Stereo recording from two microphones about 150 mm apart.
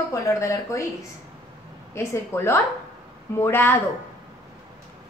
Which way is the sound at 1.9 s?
20° left (ahead or behind).